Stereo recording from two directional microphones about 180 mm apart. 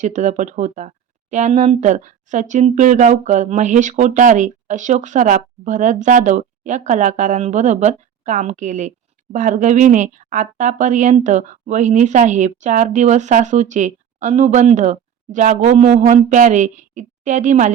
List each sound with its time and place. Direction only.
0.0 s speech: 40° right (ahead or behind)